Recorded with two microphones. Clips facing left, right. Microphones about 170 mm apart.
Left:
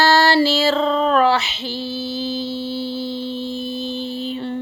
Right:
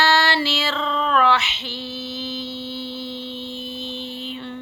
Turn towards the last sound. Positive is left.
turn(degrees=35)  # may be behind; listen again after turning